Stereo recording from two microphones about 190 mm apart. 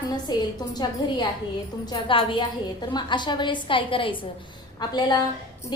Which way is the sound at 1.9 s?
25° left (ahead or behind).